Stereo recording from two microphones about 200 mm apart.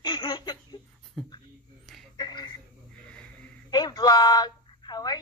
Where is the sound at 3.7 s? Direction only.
20° left (ahead or behind).